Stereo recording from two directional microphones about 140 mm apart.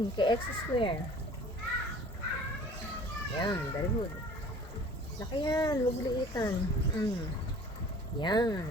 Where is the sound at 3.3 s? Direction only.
30° left (ahead or behind).